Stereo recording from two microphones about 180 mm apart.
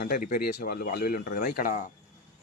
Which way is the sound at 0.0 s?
50° left (ahead or behind).